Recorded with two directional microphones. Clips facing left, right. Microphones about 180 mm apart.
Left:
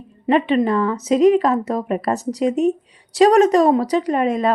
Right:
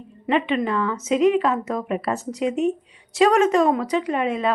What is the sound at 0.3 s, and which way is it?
Speech, 40° left (ahead or behind).